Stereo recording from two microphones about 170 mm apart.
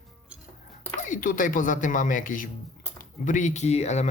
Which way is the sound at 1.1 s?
50° left (ahead or behind).